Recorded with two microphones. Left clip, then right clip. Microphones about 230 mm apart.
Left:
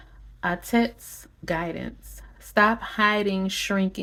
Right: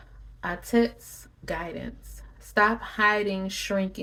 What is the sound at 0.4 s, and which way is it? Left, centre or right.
Speech, left.